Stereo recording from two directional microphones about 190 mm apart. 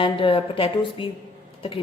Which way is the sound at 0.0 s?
25° left (ahead or behind).